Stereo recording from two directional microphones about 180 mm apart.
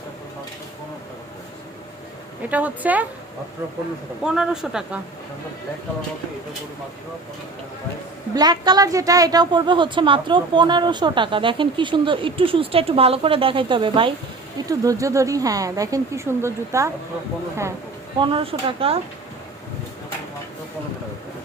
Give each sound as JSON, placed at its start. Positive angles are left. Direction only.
{"t": 2.5, "sound": "a woman's voice", "side_deg": -10}
{"t": 4.2, "sound": "speech", "side_deg": -5}
{"t": 8.4, "sound": "a woman's voice", "side_deg": -20}
{"t": 14.7, "sound": "a woman's voice", "side_deg": -20}
{"t": 18.2, "sound": "a woman's voice", "side_deg": -30}